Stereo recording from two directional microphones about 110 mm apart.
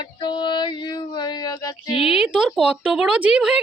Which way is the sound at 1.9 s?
55° left (ahead or behind).